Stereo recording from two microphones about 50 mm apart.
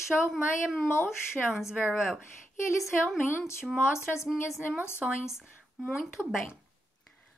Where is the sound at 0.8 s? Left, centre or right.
Left.